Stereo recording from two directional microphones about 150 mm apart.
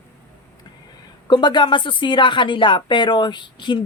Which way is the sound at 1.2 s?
30° left (ahead or behind).